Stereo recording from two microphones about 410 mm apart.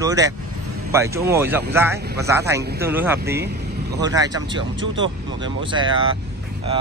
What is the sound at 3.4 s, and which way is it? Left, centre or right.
Vehicle, right.